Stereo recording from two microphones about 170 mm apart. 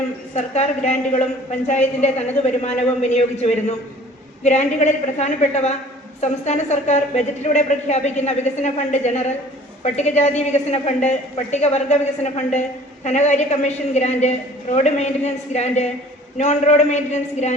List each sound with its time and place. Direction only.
0.3 s a woman's voice: 40° left (ahead or behind)